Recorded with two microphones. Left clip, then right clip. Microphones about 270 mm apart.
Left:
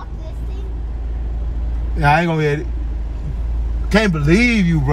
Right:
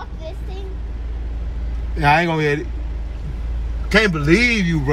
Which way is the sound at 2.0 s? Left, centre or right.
Centre.